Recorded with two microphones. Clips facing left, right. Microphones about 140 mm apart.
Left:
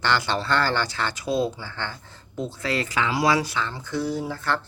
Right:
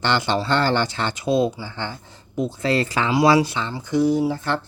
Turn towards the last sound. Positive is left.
turn(degrees=-20)  # may be behind; listen again after turning